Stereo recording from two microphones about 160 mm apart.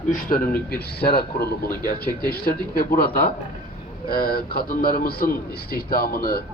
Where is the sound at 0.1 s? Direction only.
60° left (ahead or behind).